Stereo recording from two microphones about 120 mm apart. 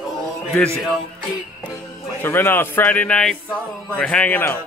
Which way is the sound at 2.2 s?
20° left (ahead or behind).